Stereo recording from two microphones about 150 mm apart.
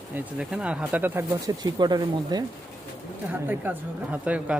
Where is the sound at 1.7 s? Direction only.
30° right (ahead or behind).